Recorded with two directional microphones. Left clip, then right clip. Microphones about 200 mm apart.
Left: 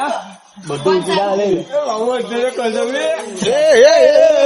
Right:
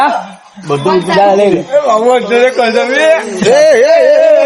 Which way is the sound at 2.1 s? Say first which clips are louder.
Right 10 dB; 55° right (ahead or behind).